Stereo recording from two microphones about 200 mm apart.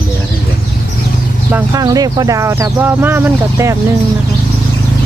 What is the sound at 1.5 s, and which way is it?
Speech, 15° right (ahead or behind).